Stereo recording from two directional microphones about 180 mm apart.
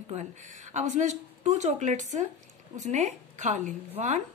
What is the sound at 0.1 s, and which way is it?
Speech, 40° right (ahead or behind).